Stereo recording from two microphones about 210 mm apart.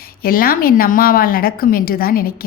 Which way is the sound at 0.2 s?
45° left (ahead or behind).